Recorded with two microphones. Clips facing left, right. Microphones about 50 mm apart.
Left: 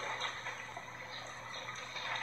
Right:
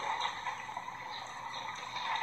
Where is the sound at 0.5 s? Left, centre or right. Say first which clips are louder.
Right 4 dB; centre.